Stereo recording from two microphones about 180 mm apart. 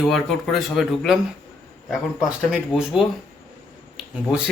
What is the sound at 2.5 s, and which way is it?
A man's voice, 5° right (ahead or behind).